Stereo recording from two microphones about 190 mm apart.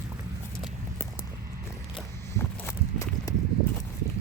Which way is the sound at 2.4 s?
15° left (ahead or behind).